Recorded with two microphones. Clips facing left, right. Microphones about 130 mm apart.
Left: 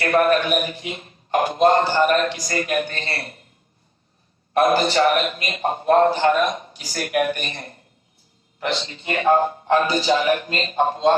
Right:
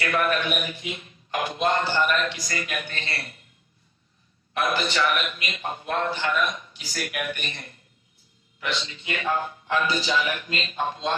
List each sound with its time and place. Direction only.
0.0 s a man's voice: 40° left (ahead or behind)
4.5 s a man's voice: 40° left (ahead or behind)